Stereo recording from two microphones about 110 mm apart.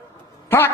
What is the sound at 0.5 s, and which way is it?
Speech, 20° left (ahead or behind).